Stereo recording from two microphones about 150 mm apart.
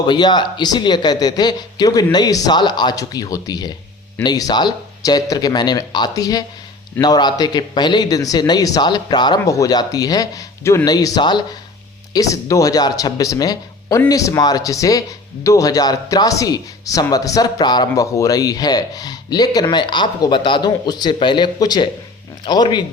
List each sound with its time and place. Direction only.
0.1 s speech: 30° left (ahead or behind)